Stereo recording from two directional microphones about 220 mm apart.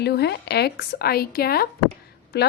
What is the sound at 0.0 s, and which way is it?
A woman's voice, 50° left (ahead or behind).